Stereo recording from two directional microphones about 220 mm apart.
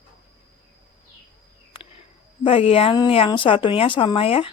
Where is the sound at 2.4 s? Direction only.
25° left (ahead or behind).